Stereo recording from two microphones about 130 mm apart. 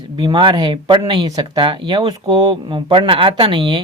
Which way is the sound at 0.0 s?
35° right (ahead or behind).